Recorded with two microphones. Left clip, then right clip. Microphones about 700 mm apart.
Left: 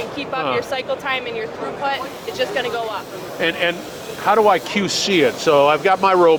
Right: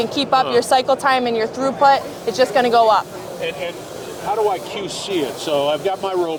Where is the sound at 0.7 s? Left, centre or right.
Right.